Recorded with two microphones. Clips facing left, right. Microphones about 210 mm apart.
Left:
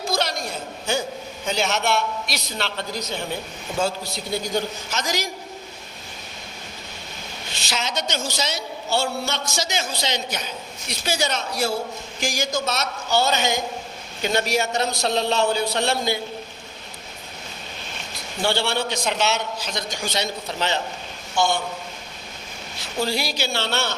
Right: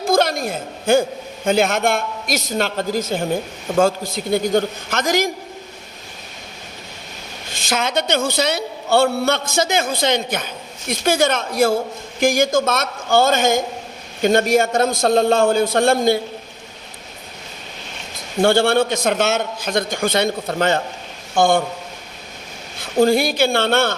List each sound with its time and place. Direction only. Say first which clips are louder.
0.0 s a sound: right 8 dB; 50° right (ahead or behind)
1.5 s a man's voice: right 7 dB; 55° right (ahead or behind)
7.5 s a man's voice: right 7 dB; 50° right (ahead or behind)
18.4 s a man's voice: right 8 dB; 50° right (ahead or behind)
22.8 s a man's voice: right 10 dB; 50° right (ahead or behind)